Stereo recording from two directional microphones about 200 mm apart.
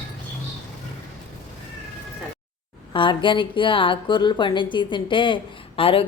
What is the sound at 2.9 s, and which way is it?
Speech, 25° left (ahead or behind).